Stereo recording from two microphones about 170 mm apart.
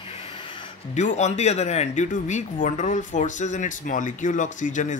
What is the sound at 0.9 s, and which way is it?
Speech, 45° left (ahead or behind).